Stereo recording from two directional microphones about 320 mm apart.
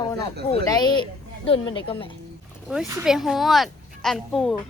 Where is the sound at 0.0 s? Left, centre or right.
Centre.